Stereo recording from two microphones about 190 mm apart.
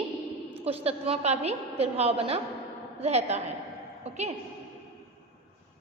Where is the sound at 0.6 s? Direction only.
30° right (ahead or behind).